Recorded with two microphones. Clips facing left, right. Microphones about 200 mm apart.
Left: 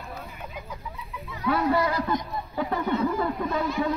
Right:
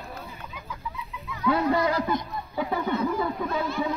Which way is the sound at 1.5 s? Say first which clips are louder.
Even; 20° right (ahead or behind).